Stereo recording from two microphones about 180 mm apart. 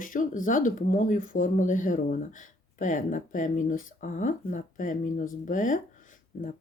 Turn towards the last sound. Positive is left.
turn(degrees=45)  # may be behind; listen again after turning